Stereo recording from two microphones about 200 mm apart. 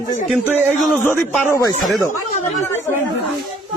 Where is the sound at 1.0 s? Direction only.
15° left (ahead or behind).